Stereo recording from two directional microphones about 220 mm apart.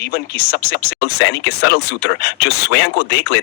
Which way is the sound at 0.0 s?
45° left (ahead or behind).